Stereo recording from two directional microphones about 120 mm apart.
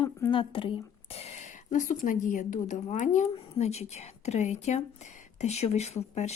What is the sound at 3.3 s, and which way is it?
Speech, 55° left (ahead or behind).